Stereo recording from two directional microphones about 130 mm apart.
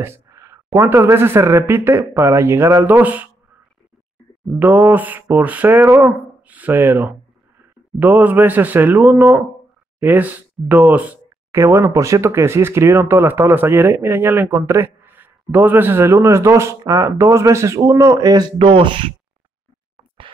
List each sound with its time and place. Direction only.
0.0 s speech: 20° right (ahead or behind)
4.5 s speech: 15° right (ahead or behind); by 19.1 s 40° right (ahead or behind)